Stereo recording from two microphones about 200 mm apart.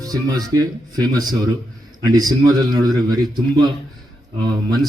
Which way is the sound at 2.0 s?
20° right (ahead or behind).